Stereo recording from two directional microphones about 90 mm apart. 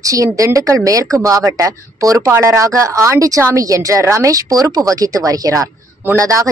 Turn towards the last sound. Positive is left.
turn(degrees=-35)  # may be behind; listen again after turning